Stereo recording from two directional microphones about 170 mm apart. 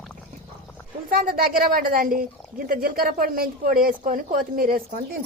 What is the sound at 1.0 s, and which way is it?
A woman's voice, 55° right (ahead or behind).